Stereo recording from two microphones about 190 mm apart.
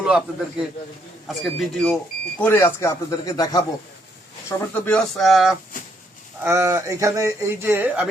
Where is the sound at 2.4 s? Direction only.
10° left (ahead or behind).